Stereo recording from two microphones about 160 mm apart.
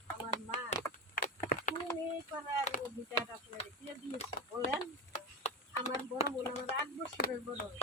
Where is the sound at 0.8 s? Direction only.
15° left (ahead or behind).